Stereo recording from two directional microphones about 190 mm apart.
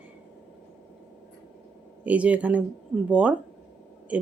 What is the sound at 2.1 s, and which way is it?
Speech, 5° right (ahead or behind).